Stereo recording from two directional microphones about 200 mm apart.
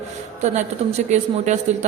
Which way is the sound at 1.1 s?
35° right (ahead or behind).